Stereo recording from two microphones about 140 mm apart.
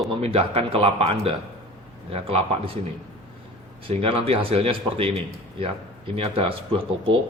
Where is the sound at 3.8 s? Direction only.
45° right (ahead or behind).